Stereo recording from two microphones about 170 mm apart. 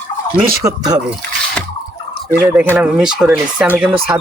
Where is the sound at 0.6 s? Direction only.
20° right (ahead or behind).